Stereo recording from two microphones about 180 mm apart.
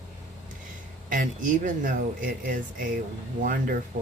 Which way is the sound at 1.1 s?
50° right (ahead or behind).